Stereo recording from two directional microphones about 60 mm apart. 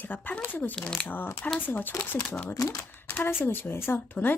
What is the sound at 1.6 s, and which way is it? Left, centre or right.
Speech, left.